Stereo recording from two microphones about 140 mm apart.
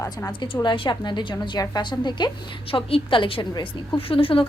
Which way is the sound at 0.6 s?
30° left (ahead or behind).